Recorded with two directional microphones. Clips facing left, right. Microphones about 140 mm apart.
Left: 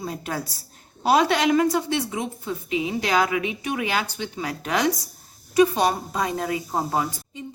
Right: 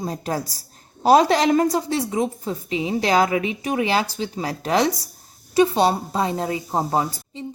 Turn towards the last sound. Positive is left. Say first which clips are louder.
# right 3 dB
turn(degrees=-30)  # may be behind; listen again after turning